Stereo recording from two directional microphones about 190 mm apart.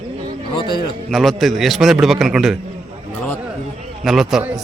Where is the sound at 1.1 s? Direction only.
Centre (ahead or behind).